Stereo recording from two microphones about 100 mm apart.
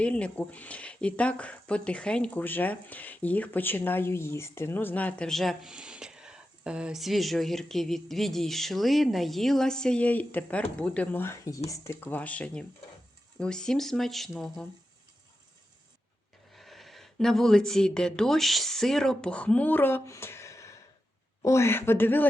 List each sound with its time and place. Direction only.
0.0 s speech: 10° left (ahead or behind)
5.7 s speech: 10° right (ahead or behind); by 11.9 s 30° left (ahead or behind)
11.9 s speech: 15° left (ahead or behind)
16.5 s a man's voice: centre (ahead or behind); by 22.3 s 20° left (ahead or behind)